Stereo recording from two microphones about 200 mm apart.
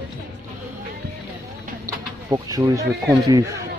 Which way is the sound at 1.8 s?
15° right (ahead or behind).